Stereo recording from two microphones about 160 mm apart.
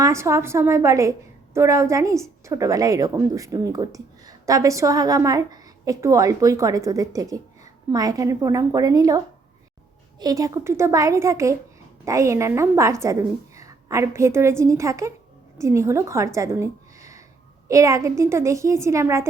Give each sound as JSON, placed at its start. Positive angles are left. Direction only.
{"t": 0.0, "sound": "a woman's voice", "side_deg": -20}